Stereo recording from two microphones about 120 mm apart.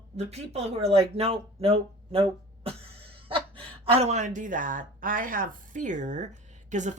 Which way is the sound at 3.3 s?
55° right (ahead or behind).